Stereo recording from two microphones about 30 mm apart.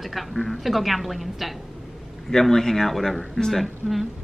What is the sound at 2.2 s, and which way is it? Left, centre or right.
Speech, centre.